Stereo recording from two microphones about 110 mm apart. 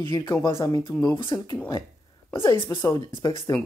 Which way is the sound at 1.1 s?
45° left (ahead or behind).